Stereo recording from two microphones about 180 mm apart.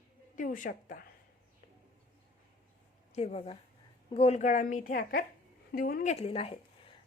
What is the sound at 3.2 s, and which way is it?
A woman's voice, 35° left (ahead or behind).